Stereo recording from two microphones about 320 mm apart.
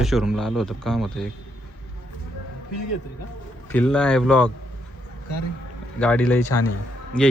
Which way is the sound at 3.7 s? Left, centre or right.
Centre.